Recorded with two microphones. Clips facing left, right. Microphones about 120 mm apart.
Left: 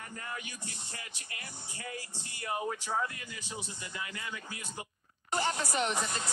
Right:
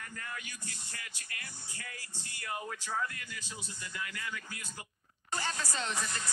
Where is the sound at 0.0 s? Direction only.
25° left (ahead or behind).